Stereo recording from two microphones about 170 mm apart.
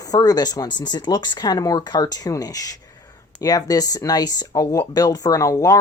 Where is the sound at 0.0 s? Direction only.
20° left (ahead or behind).